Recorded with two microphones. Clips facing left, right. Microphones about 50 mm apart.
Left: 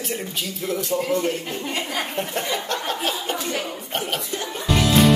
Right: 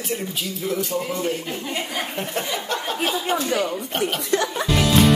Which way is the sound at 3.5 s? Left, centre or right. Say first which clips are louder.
Right 5 dB; right.